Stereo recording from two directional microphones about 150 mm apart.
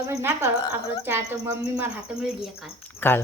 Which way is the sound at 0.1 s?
15° right (ahead or behind).